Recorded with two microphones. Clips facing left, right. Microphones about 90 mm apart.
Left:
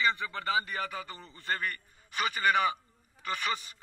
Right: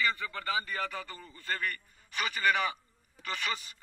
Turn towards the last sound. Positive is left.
turn(degrees=20)  # may be behind; listen again after turning